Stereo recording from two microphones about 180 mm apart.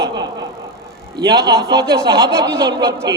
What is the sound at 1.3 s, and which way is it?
Speech, 20° right (ahead or behind).